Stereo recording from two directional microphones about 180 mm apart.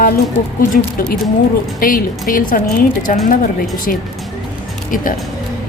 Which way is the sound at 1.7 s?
50° left (ahead or behind).